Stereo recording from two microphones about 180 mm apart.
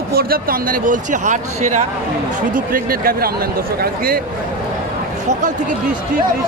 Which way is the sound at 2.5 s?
55° right (ahead or behind).